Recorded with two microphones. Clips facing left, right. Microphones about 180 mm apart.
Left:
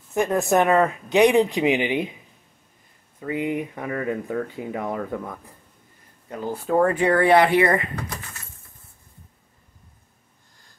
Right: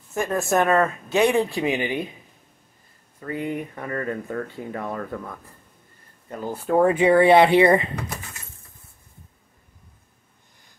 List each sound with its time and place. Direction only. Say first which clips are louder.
0.1 s speech: left 2 dB; 15° left (ahead or behind)
3.2 s speech: left 3 dB; 15° left (ahead or behind)
6.2 s speech: even; 5° left (ahead or behind)
6.8 s speech: right 3 dB; 15° right (ahead or behind)